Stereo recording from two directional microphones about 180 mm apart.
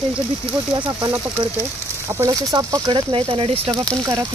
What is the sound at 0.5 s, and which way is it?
Speech, 25° right (ahead or behind).